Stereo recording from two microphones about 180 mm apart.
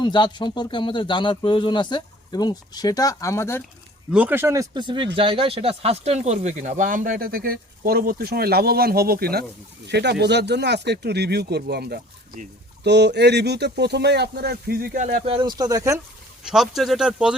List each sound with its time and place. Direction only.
0.0 s speech: 25° left (ahead or behind)
4.1 s speech: 10° right (ahead or behind); by 9.4 s 60° right (ahead or behind)
9.8 s speech: 70° right (ahead or behind); by 15.2 s 45° right (ahead or behind)
15.3 s speech: 25° right (ahead or behind)
16.4 s speech: centre (ahead or behind)